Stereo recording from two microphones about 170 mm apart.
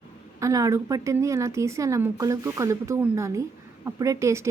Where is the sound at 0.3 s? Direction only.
20° right (ahead or behind).